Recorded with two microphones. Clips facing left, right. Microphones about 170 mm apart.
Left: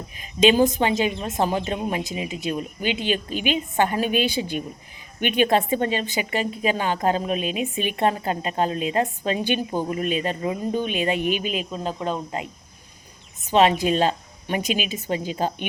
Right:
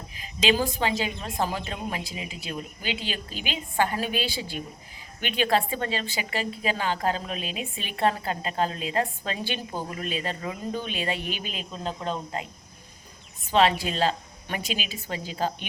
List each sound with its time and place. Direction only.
0.3 s a woman's voice: 20° left (ahead or behind)
13.4 s a woman's voice: 20° left (ahead or behind)